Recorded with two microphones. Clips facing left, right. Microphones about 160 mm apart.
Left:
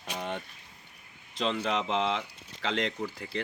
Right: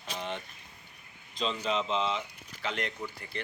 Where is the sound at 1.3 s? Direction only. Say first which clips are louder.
Left 2 dB; 70° left (ahead or behind).